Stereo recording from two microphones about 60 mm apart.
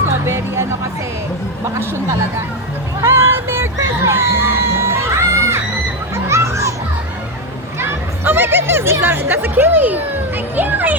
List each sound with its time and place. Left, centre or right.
0.3 s speech: right
3.0 s a sound: right
6.2 s children playing: right
7.8 s speech: right